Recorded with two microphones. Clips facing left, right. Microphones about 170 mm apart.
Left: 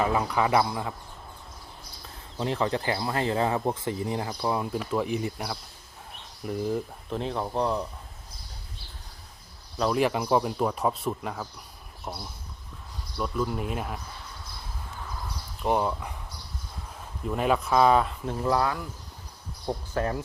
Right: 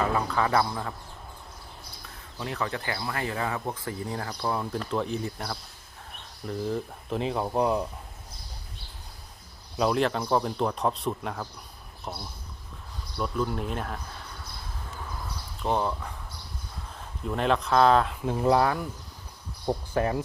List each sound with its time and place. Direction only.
0.0 s speech: 15° left (ahead or behind)
2.4 s speech: 25° left (ahead or behind)
6.5 s speech: 10° left (ahead or behind)
7.1 s speech: centre (ahead or behind)
9.7 s speech: 5° right (ahead or behind)
10.0 s speech: 10° left (ahead or behind)
15.6 s speech: 10° left (ahead or behind)
17.2 s speech: 5° left (ahead or behind)
18.3 s speech: 20° right (ahead or behind)